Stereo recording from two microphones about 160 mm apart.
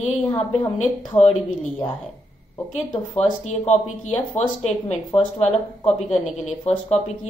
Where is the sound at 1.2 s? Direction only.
15° left (ahead or behind).